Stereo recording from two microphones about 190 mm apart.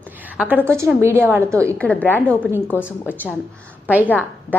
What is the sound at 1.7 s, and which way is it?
A woman's voice, 5° left (ahead or behind).